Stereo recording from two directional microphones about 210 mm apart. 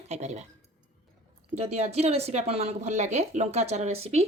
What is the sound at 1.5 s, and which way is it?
Speech, 30° right (ahead or behind).